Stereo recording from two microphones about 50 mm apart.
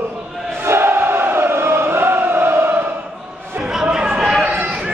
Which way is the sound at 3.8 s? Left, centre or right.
Centre.